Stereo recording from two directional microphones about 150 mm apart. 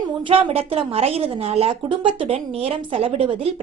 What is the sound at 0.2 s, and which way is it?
Speech, 35° right (ahead or behind).